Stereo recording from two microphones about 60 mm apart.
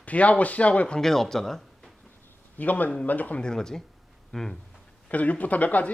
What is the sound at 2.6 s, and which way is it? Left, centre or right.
Speech, left.